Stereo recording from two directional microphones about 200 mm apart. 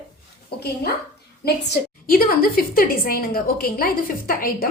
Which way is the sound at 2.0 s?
45° left (ahead or behind).